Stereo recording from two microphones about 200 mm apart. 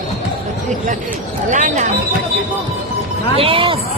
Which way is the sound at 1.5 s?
40° right (ahead or behind).